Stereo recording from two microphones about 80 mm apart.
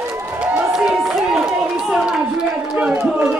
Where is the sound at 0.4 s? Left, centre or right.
Centre.